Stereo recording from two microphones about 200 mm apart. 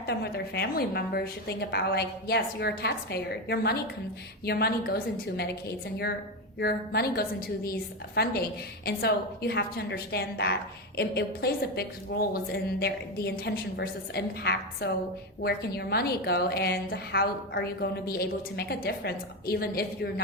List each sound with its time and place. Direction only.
0.0 s a woman's voice: 50° left (ahead or behind)
6.6 s a woman's voice: 50° left (ahead or behind)